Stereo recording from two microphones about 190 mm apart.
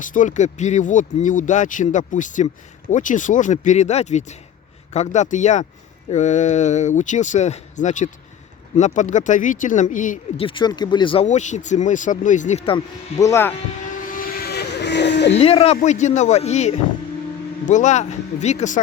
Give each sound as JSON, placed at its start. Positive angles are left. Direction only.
{"t": 0.0, "sound": "speech", "side_deg": 45}
{"t": 10.4, "sound": "speech", "side_deg": 25}
{"t": 13.1, "sound": "speech", "side_deg": 15}
{"t": 14.1, "sound": "vehicle", "side_deg": 50}
{"t": 15.4, "sound": "speech", "side_deg": 30}